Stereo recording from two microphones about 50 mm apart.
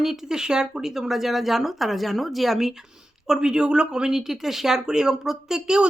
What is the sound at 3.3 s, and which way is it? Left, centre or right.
Speech, centre.